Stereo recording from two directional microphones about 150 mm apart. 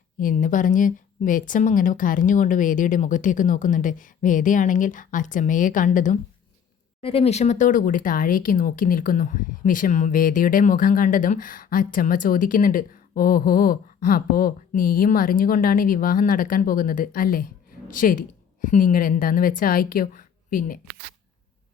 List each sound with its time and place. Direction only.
0.2 s speech: 60° left (ahead or behind)
7.0 s speech: 40° left (ahead or behind); by 20.7 s 65° left (ahead or behind)